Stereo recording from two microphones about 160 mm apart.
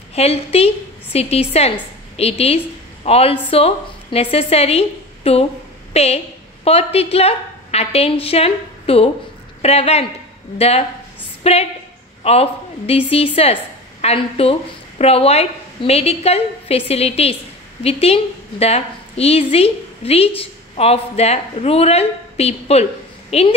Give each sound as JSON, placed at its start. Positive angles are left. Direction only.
{"t": 0.1, "sound": "a woman's voice", "side_deg": 40}